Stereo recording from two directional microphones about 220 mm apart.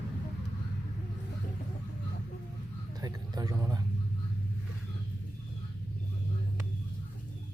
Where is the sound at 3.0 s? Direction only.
15° right (ahead or behind).